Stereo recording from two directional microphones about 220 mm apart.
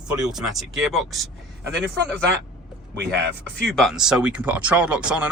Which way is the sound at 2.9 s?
50° right (ahead or behind).